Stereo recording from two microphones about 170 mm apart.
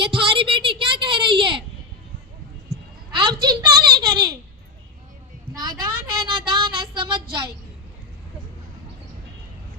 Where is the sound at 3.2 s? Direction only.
25° right (ahead or behind).